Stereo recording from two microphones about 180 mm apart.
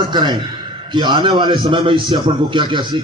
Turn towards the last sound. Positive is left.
turn(degrees=-25)  # may be behind; listen again after turning